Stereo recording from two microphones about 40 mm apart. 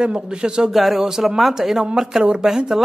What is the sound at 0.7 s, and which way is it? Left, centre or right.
Speech, centre.